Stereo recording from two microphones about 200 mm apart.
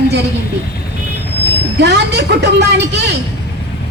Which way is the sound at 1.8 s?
60° right (ahead or behind).